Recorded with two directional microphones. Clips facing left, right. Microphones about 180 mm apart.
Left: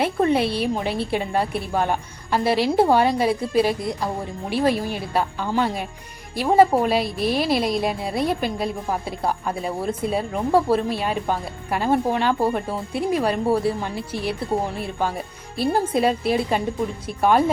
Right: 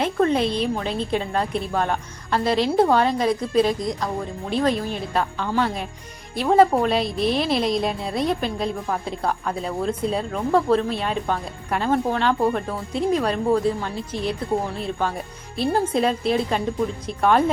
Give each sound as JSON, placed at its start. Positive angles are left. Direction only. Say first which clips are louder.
{"t": 0.0, "sound": "a woman's voice", "louder": "even", "side_deg": 10}
{"t": 15.5, "sound": "a woman's voice", "louder": "even", "side_deg": 10}